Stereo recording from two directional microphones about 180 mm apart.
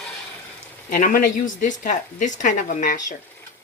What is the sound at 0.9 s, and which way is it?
Cutlery, 50° left (ahead or behind).